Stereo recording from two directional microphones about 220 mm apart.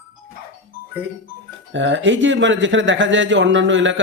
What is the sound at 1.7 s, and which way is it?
Speech, 55° right (ahead or behind).